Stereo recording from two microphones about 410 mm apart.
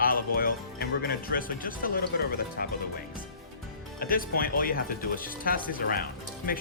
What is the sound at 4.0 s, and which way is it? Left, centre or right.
Speech, left.